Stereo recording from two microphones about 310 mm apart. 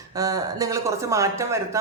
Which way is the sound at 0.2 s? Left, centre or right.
Centre.